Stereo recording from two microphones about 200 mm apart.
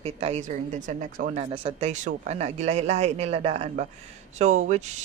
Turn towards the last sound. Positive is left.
turn(degrees=-35)  # may be behind; listen again after turning